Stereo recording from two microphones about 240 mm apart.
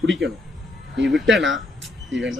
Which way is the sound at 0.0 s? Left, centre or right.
Right.